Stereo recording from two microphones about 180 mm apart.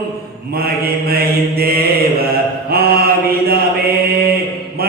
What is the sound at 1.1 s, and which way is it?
Mantra, 55° right (ahead or behind).